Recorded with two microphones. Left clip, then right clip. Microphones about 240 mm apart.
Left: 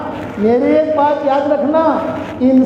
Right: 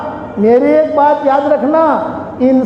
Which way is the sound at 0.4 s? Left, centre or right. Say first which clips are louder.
Right 3 dB; right.